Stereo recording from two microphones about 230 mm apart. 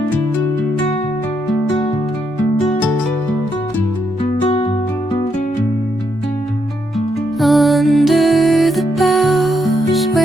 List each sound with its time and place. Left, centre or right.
4.4 s music: left
7.3 s music: centre